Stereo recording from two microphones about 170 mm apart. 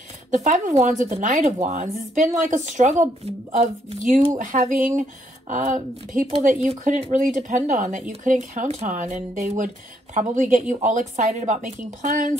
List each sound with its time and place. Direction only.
0.3 s speech: 45° right (ahead or behind)